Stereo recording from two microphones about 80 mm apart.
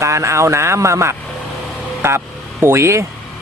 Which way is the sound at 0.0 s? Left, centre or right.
Right.